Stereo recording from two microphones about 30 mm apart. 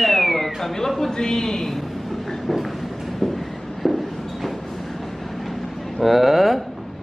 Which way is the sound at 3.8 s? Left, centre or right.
Centre.